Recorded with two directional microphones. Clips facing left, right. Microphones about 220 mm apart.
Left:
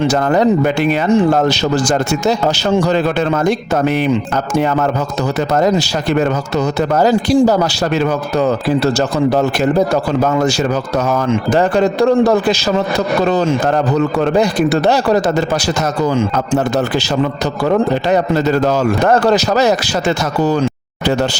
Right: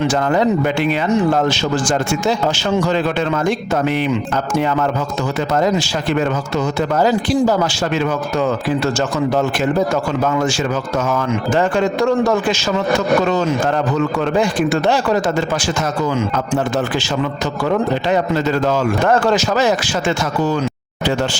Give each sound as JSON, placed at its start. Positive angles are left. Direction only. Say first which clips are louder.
{"t": 0.0, "sound": "speech", "louder": "left 3 dB", "side_deg": 40}
{"t": 5.5, "sound": "speech", "louder": "left 3 dB", "side_deg": 40}
{"t": 11.3, "sound": "speech", "louder": "left 4 dB", "side_deg": 35}
{"t": 17.7, "sound": "speech", "louder": "left 3 dB", "side_deg": 40}